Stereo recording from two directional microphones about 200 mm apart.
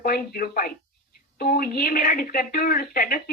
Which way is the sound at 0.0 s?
45° left (ahead or behind).